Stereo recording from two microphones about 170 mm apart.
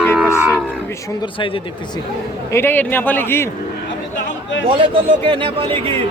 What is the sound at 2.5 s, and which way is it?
Speech, 15° left (ahead or behind).